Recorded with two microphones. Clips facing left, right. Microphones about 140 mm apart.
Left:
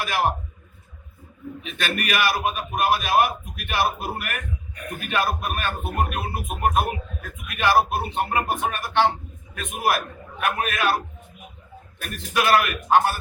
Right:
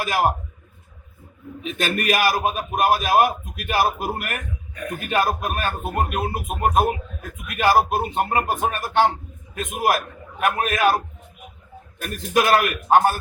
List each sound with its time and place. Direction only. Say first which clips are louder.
0.0 s speech: right 3 dB; 40° right (ahead or behind)
1.6 s speech: right 5 dB; 45° right (ahead or behind)
12.0 s speech: right 3 dB; 45° right (ahead or behind)